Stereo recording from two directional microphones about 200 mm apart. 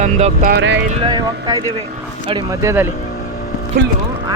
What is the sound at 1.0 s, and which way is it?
Speech, 20° right (ahead or behind).